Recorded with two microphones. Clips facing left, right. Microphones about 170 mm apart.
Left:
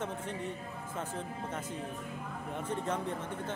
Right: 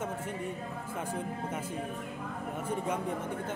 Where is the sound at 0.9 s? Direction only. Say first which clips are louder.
Right 3 dB; 10° right (ahead or behind).